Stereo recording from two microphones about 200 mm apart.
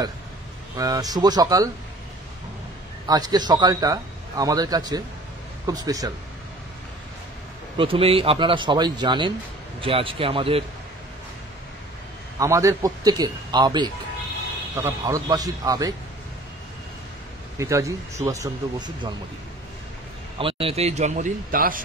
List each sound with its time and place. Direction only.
0.7 s speech: 15° right (ahead or behind)
3.1 s a man's voice: 20° right (ahead or behind)
7.7 s a man's voice: 25° right (ahead or behind)
12.4 s a man's voice: 15° right (ahead or behind)
17.6 s speech: 15° right (ahead or behind)
20.3 s a man's voice: 25° right (ahead or behind); by 21.8 s 45° right (ahead or behind)